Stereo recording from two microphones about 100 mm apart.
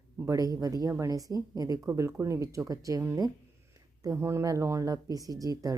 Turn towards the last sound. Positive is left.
turn(degrees=-35)  # may be behind; listen again after turning